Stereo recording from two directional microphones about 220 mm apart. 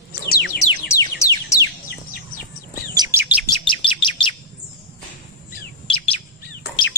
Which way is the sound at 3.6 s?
20° left (ahead or behind).